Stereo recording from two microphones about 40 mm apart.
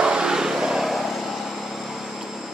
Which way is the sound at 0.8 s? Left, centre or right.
Centre.